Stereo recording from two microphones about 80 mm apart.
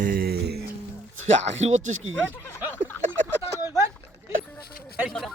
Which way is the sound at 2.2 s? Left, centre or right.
Left.